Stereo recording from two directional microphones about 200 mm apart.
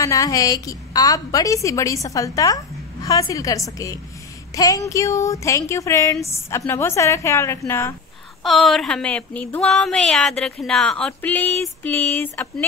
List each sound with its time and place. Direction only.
0.0 s a woman's voice: 15° left (ahead or behind)
8.5 s speech: centre (ahead or behind)